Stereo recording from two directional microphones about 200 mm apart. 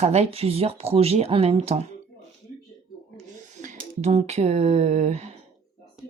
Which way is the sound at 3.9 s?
35° right (ahead or behind).